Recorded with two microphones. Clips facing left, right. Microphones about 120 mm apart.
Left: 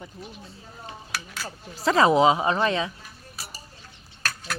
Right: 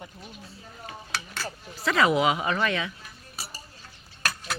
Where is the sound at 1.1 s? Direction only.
10° left (ahead or behind).